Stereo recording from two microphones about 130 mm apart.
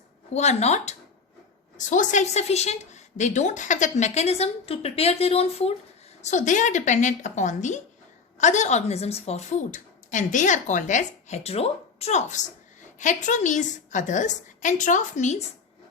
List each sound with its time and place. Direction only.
0.3 s a woman's voice: 60° left (ahead or behind)
1.8 s a woman's voice: 75° left (ahead or behind); by 5.7 s 55° left (ahead or behind)
6.2 s a woman's voice: 70° left (ahead or behind)